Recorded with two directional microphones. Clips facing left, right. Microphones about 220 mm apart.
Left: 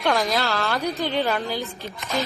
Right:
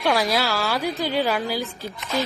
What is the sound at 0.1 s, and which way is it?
Speech, 5° right (ahead or behind).